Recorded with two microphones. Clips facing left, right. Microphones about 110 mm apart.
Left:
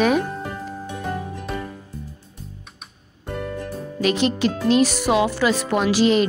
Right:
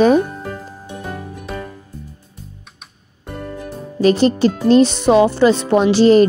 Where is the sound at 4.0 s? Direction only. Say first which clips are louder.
Right 7 dB; 35° right (ahead or behind).